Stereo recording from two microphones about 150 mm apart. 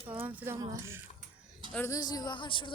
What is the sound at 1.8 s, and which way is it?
Speech, 25° left (ahead or behind).